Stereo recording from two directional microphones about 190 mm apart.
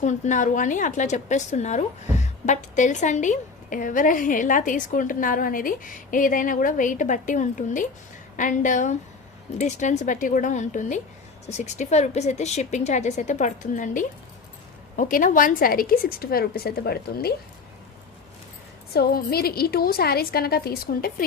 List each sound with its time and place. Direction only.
0.0 s a woman's voice: 40° left (ahead or behind)
18.9 s a woman's voice: 55° left (ahead or behind)